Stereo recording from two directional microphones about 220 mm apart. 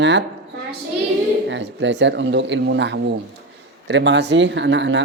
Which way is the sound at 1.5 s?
55° right (ahead or behind).